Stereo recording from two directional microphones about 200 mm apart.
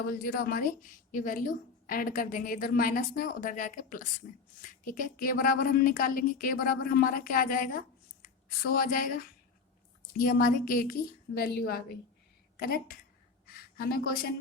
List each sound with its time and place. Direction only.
0.1 s speech: 45° left (ahead or behind)
10.2 s a woman's voice: 45° left (ahead or behind)